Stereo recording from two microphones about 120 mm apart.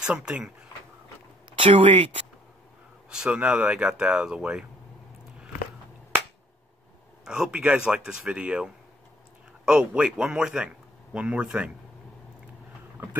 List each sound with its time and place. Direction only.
0.0 s speech: 5° right (ahead or behind)
1.6 s speech: 50° right (ahead or behind)
3.1 s speech: 10° right (ahead or behind)
7.2 s speech: 5° right (ahead or behind)
13.0 s boat: 20° right (ahead or behind)